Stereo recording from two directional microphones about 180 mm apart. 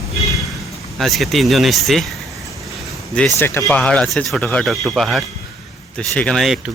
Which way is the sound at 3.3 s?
15° left (ahead or behind).